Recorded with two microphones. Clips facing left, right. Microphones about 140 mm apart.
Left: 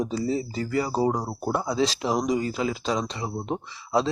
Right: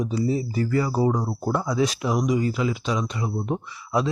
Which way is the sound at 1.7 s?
30° left (ahead or behind).